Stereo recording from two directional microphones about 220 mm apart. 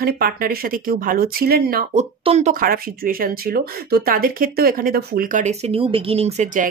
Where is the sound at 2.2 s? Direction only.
30° right (ahead or behind).